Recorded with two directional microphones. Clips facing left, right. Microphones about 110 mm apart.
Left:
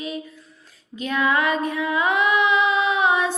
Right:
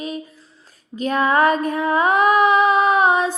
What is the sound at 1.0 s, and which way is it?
Female singing, 40° right (ahead or behind).